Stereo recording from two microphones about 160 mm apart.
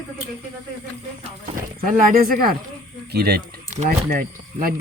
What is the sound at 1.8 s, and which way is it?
Speech, 65° right (ahead or behind).